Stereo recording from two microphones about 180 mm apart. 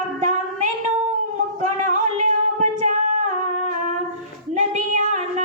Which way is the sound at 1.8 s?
40° right (ahead or behind).